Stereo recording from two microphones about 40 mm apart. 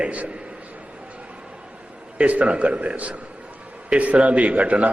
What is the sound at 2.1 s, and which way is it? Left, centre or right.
A man's voice, right.